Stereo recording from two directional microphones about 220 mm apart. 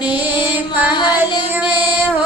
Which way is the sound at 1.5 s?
10° right (ahead or behind).